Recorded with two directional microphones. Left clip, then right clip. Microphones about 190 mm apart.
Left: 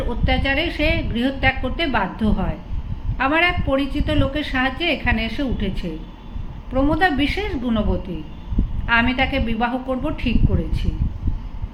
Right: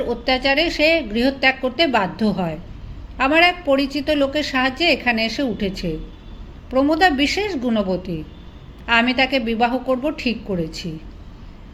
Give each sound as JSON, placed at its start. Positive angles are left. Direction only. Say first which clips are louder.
{"t": 0.1, "sound": "a woman's voice", "louder": "right 3 dB", "side_deg": -40}